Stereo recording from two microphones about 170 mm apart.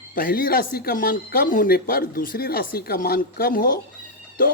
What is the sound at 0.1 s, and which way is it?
Speech, 55° left (ahead or behind).